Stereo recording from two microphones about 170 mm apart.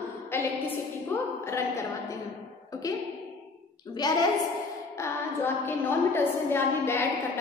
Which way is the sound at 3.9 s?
25° left (ahead or behind).